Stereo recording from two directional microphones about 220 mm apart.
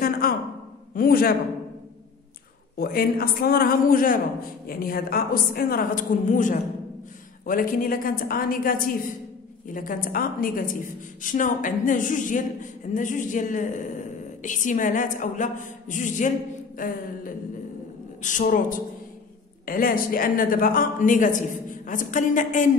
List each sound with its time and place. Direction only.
0.0 s a sound: 40° left (ahead or behind)
0.9 s a man's voice: 40° left (ahead or behind)
2.8 s a woman's voice: 40° left (ahead or behind)
9.8 s a woman's voice: 40° left (ahead or behind)